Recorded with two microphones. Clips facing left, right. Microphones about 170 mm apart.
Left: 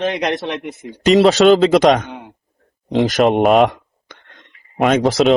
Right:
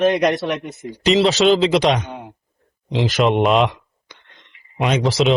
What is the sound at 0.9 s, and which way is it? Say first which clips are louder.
Speech: left 4 dB; 50° left (ahead or behind).